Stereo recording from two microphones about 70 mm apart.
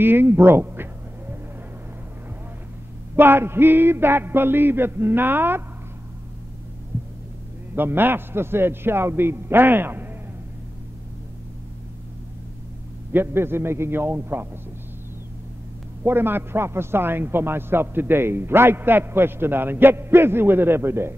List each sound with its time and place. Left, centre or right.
0.0 s a sound: right
3.2 s a man's voice: right
7.7 s a man's voice: right
13.1 s a man's voice: right
16.0 s a man's voice: right